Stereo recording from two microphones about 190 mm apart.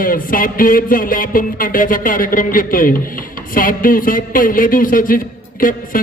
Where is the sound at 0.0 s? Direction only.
50° left (ahead or behind).